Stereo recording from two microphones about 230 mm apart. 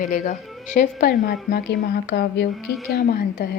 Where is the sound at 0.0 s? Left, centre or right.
Left.